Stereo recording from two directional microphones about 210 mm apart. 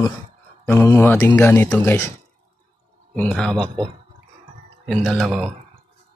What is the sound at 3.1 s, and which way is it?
Speech, 5° left (ahead or behind).